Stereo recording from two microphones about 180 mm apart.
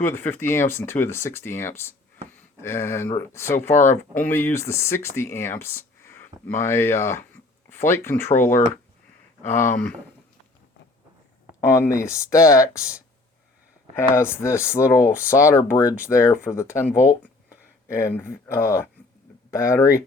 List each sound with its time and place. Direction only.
0.0 s speech: 15° left (ahead or behind)
11.6 s speech: 15° left (ahead or behind)
13.9 s speech: 15° left (ahead or behind)